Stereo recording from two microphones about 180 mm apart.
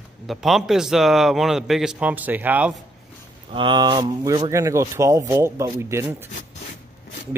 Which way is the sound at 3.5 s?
25° right (ahead or behind).